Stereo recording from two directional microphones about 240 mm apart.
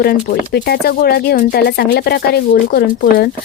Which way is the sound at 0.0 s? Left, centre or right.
Left.